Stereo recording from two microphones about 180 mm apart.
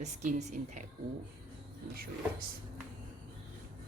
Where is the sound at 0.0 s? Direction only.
40° right (ahead or behind).